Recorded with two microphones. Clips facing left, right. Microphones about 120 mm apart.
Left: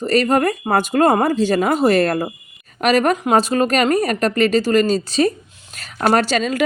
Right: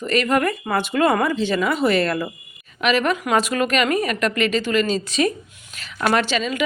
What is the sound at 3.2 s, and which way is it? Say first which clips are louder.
A woman's voice: left 4 dB; 30° left (ahead or behind).